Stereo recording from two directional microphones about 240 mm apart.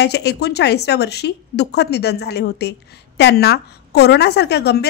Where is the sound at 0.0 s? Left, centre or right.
Left.